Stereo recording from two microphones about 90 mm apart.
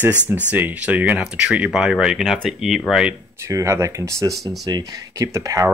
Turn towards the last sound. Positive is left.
turn(degrees=-35)  # may be behind; listen again after turning